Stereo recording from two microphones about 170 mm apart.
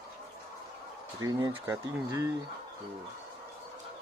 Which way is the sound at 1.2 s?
20° right (ahead or behind).